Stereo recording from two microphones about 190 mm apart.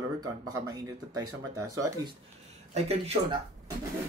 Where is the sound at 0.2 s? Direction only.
20° right (ahead or behind).